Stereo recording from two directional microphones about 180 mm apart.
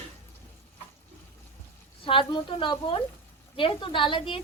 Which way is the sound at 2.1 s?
30° left (ahead or behind).